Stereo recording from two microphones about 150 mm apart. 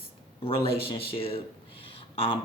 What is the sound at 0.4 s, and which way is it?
Speech, 35° left (ahead or behind).